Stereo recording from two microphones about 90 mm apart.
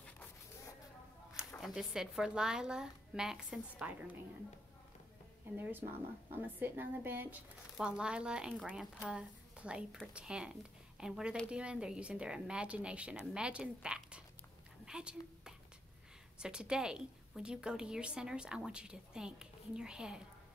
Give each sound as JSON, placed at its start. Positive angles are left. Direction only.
{"t": 1.6, "sound": "a woman's voice", "side_deg": -5}
{"t": 5.6, "sound": "a woman's voice", "side_deg": -20}
{"t": 7.7, "sound": "a woman's voice", "side_deg": -10}